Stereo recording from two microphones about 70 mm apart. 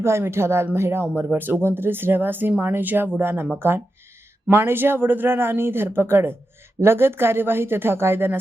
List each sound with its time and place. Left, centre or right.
0.0 s speech: right